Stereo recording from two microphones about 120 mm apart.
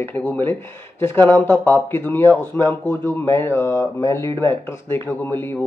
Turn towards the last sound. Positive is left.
turn(degrees=20)  # may be behind; listen again after turning